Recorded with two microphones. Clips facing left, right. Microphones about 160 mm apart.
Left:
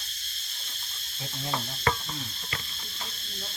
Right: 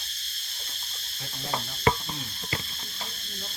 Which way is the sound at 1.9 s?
20° right (ahead or behind).